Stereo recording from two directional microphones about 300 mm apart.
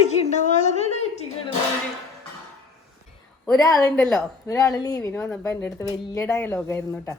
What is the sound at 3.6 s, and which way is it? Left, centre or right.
A woman's voice, centre.